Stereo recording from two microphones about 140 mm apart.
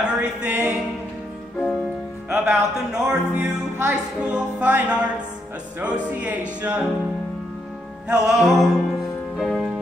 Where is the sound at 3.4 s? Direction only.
15° right (ahead or behind).